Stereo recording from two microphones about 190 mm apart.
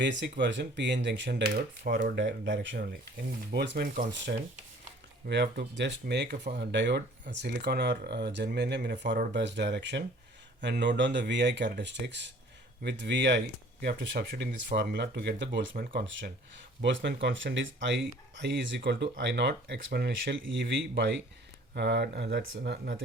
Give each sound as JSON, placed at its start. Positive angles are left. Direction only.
{"t": 0.0, "sound": "speech", "side_deg": -70}
{"t": 2.1, "sound": "speech", "side_deg": -70}
{"t": 3.5, "sound": "speech", "side_deg": -60}
{"t": 5.2, "sound": "speech", "side_deg": -60}
{"t": 16.8, "sound": "speech", "side_deg": -70}